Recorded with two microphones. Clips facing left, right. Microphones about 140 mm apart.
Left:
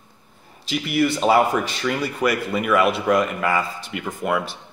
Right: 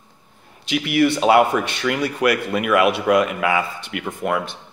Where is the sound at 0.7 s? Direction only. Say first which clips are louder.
Right 3 dB; centre (ahead or behind).